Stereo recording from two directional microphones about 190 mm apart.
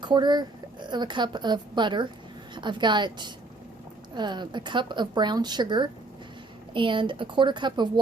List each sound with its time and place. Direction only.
0.0 s a woman's voice: 25° right (ahead or behind)